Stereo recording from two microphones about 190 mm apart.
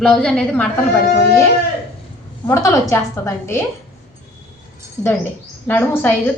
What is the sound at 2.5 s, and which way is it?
Speech, 15° left (ahead or behind).